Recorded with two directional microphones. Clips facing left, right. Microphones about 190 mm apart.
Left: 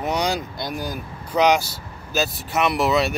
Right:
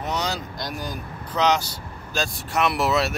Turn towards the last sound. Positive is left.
turn(degrees=0)  # may be behind; listen again after turning